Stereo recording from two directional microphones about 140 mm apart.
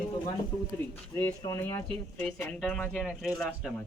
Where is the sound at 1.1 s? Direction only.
15° left (ahead or behind).